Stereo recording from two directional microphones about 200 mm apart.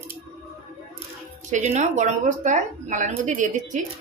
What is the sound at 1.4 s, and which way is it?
A woman's voice, 35° right (ahead or behind).